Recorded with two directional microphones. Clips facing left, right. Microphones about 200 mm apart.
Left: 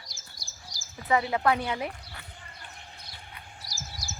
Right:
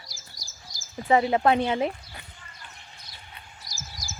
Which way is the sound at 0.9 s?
30° right (ahead or behind).